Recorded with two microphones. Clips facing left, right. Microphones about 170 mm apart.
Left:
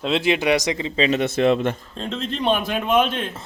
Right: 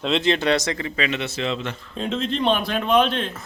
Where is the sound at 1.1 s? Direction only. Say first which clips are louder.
Left 12 dB; 50° left (ahead or behind).